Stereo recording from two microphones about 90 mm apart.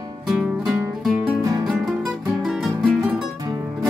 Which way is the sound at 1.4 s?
45° right (ahead or behind).